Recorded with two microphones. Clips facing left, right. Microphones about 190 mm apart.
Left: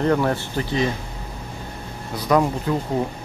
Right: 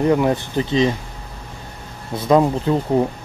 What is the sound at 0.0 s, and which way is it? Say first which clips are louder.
Speech: right 3 dB; 15° right (ahead or behind).